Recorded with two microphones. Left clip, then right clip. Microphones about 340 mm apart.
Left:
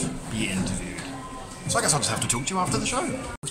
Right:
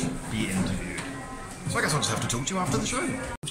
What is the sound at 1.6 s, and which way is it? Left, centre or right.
Speech, centre.